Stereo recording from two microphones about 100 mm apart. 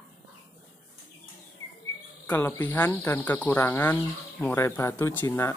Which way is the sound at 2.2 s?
20° left (ahead or behind).